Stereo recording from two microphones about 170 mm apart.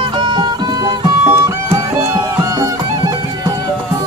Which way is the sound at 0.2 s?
25° right (ahead or behind).